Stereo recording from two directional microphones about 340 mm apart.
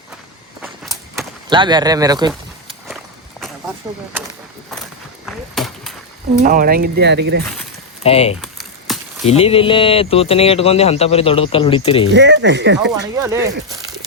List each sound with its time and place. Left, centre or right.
1.5 s speech: centre
5.2 s a sound: centre
6.4 s speech: right
8.0 s speech: centre
8.4 s a sound: centre
9.2 s speech: centre
12.1 s speech: right
12.9 s speech: centre